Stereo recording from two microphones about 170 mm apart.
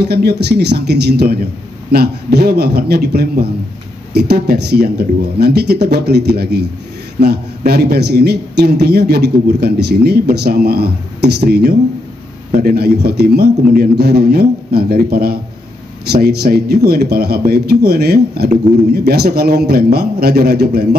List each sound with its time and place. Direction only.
0.0 s a man's voice: 70° right (ahead or behind)